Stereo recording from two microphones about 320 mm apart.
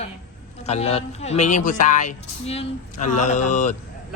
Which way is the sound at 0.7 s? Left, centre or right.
Centre.